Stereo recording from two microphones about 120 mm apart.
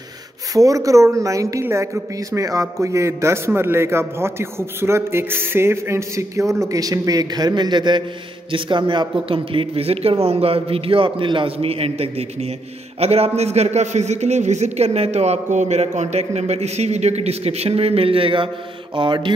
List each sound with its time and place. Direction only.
0.6 s a man's voice: 30° right (ahead or behind)